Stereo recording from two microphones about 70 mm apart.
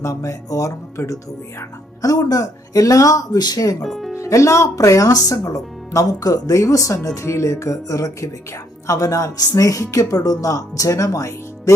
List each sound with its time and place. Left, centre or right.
0.0 s speech: left
3.8 s speech: centre
4.2 s speech: left